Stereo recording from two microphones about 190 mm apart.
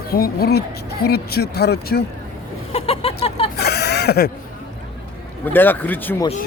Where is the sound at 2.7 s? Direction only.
30° left (ahead or behind).